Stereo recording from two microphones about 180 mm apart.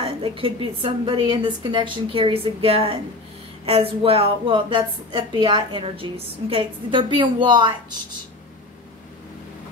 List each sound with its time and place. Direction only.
0.0 s a woman's voice: 30° right (ahead or behind)